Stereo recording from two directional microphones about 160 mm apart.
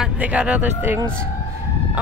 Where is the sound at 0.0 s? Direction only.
5° right (ahead or behind).